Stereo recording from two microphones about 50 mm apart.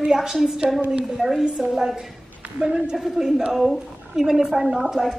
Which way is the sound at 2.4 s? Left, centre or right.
Centre.